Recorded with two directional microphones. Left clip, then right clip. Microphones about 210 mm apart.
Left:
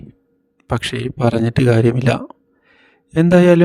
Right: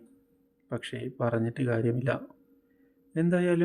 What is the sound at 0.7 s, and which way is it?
Speech, 50° left (ahead or behind).